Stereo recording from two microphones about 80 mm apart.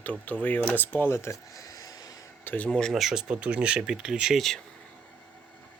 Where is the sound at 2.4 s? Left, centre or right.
Left.